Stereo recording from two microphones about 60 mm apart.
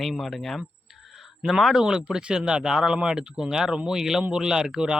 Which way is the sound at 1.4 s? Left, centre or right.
Centre.